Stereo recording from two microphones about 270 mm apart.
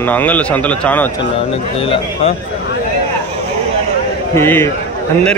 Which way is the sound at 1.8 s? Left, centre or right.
Left.